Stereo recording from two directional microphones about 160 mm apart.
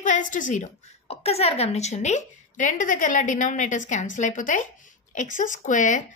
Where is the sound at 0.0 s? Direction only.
50° left (ahead or behind).